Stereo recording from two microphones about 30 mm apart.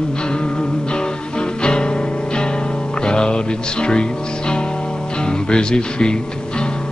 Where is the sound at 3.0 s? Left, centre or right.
Left.